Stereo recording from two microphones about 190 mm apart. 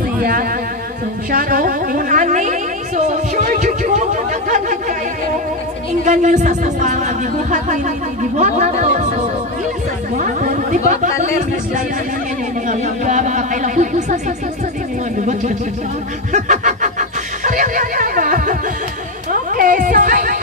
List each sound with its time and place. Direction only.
0.2 s speech: 50° right (ahead or behind)
6.0 s speech: 40° right (ahead or behind)
12.6 s speech: 40° right (ahead or behind)
16.3 s snicker: 40° right (ahead or behind)
17.4 s music: 45° right (ahead or behind)